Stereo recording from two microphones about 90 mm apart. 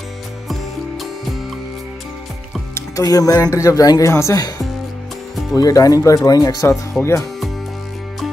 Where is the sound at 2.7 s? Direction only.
40° left (ahead or behind).